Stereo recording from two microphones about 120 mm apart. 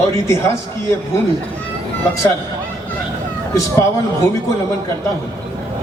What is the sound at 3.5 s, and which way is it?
Speech, 25° left (ahead or behind).